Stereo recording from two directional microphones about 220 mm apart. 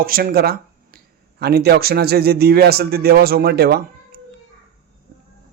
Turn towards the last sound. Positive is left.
turn(degrees=-45)  # may be behind; listen again after turning